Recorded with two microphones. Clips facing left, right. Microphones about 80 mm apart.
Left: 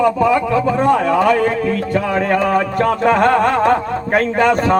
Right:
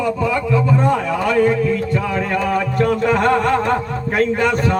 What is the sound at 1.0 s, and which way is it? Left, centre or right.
A man's voice, left.